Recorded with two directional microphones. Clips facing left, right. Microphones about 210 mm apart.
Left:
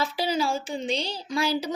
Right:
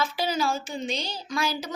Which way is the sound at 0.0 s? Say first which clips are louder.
Left 1 dB; 35° left (ahead or behind).